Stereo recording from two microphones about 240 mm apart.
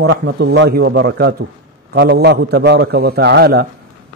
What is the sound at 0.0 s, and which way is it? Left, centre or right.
A man's voice, right.